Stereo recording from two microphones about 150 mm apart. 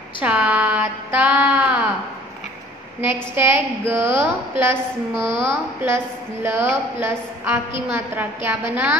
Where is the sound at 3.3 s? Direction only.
15° right (ahead or behind).